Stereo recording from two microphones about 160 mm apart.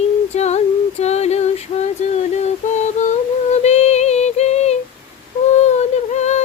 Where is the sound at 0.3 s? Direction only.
45° left (ahead or behind).